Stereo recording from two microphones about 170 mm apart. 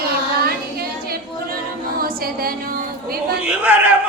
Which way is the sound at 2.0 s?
60° right (ahead or behind).